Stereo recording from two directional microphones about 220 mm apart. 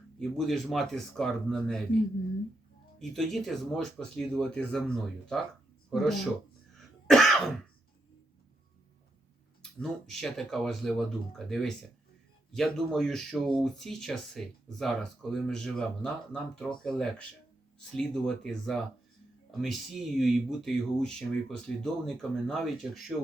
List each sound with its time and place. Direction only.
0.2 s speech: centre (ahead or behind)
3.0 s speech: centre (ahead or behind)
6.7 s throat clearing: centre (ahead or behind)
9.8 s speech: centre (ahead or behind)